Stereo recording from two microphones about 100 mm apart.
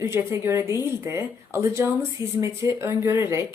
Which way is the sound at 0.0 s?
30° right (ahead or behind).